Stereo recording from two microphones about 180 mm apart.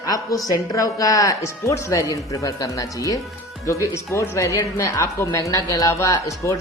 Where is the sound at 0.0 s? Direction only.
20° left (ahead or behind).